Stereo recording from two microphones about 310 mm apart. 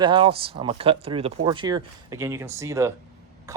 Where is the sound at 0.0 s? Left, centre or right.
Centre.